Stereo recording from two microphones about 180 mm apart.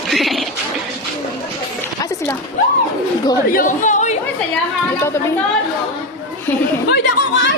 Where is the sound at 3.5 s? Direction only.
45° left (ahead or behind).